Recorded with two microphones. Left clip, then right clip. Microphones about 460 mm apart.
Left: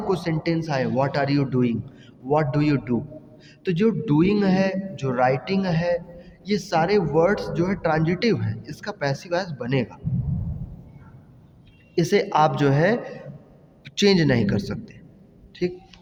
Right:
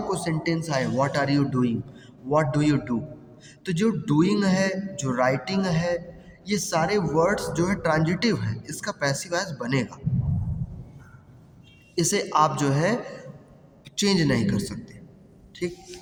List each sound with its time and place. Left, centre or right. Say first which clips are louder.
0.1 s speech: left 4 dB; left
11.9 s a woman's voice: left 2 dB; left
15.5 s a sound: left 4 dB; left